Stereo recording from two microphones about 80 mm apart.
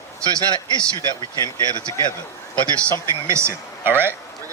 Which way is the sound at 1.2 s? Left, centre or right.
Left.